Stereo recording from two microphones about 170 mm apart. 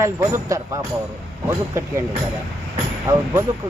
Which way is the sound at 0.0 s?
15° right (ahead or behind).